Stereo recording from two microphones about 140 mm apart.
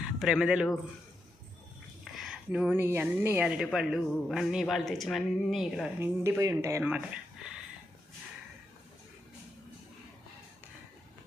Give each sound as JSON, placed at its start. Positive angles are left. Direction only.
{"t": 0.2, "sound": "speech", "side_deg": -5}
{"t": 2.1, "sound": "speech", "side_deg": -5}
{"t": 6.0, "sound": "speech", "side_deg": -15}